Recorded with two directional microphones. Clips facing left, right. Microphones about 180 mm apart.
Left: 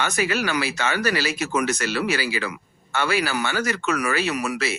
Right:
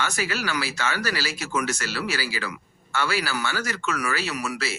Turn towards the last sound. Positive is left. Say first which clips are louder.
# left 4 dB
turn(degrees=20)  # may be behind; listen again after turning